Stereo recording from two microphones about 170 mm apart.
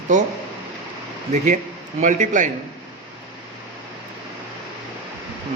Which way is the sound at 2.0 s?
45° right (ahead or behind).